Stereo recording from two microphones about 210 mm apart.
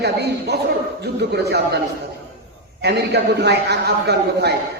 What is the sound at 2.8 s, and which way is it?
A man's voice, 55° right (ahead or behind).